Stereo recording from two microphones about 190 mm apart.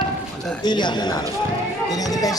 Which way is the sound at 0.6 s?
25° left (ahead or behind).